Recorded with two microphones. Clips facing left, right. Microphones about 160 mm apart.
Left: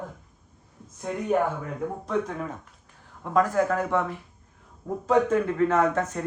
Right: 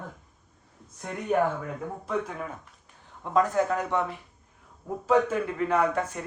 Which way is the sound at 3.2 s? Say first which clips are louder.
Left 1 dB; 20° right (ahead or behind).